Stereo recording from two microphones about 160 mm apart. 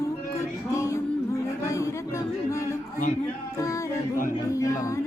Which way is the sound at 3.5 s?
20° left (ahead or behind).